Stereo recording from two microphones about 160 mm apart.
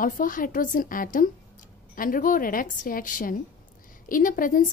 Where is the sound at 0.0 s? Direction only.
60° left (ahead or behind).